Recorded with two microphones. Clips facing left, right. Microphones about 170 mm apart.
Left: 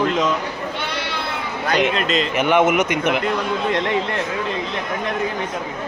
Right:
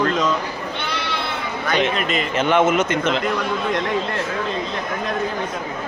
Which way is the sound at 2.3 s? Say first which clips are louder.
Even; 15° left (ahead or behind).